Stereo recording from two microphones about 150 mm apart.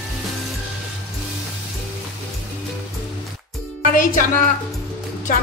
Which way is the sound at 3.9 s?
65° left (ahead or behind).